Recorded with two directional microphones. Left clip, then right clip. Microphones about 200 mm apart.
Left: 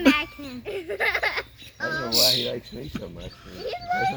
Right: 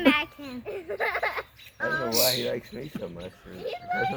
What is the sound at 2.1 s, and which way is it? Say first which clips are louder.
Speech: left 7 dB; centre (ahead or behind).